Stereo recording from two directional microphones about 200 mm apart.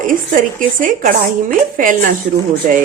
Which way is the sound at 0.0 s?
40° right (ahead or behind).